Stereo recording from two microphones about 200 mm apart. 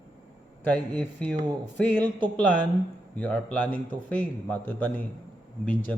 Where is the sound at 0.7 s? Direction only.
5° left (ahead or behind).